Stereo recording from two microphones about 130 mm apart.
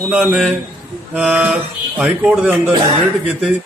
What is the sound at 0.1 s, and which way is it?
A man's voice, 10° right (ahead or behind).